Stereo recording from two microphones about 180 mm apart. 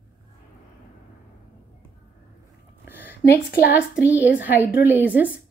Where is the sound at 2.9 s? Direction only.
10° right (ahead or behind).